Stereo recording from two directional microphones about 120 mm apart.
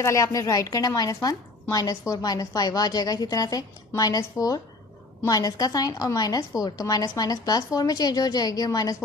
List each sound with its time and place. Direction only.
0.0 s a woman's voice: 25° left (ahead or behind)